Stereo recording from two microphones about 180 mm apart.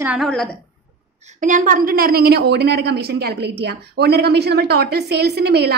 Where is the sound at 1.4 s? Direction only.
45° right (ahead or behind); by 5.7 s 65° right (ahead or behind).